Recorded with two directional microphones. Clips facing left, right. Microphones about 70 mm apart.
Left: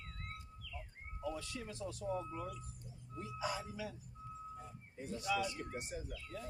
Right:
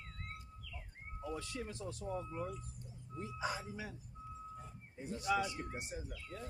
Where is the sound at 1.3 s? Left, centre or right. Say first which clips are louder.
Even; right.